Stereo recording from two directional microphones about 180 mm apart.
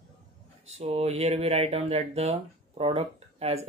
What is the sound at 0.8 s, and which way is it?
Speech, 35° right (ahead or behind).